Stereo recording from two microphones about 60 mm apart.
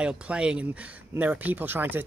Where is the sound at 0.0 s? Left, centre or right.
Centre.